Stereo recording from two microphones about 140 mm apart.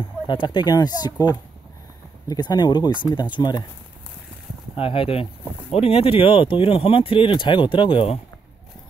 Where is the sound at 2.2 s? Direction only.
30° left (ahead or behind).